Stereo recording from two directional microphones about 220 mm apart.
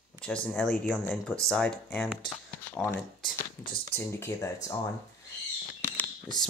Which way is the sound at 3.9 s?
10° left (ahead or behind).